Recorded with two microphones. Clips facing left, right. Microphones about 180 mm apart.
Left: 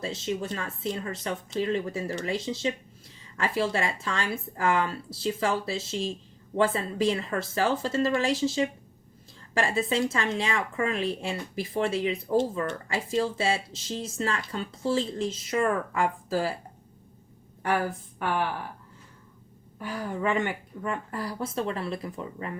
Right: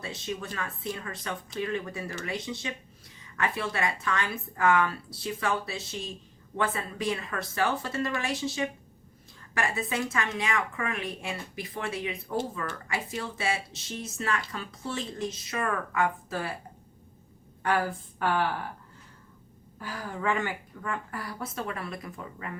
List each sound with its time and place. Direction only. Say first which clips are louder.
0.0 s speech: left 5 dB; 25° left (ahead or behind)
19.8 s speech: left 3 dB; 20° left (ahead or behind)